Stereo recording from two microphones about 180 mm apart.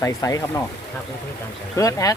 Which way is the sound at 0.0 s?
20° left (ahead or behind).